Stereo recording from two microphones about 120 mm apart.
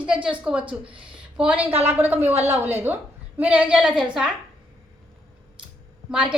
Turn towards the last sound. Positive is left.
turn(degrees=-10)  # may be behind; listen again after turning